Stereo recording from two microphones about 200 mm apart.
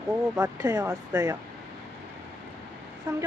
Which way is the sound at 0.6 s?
20° right (ahead or behind).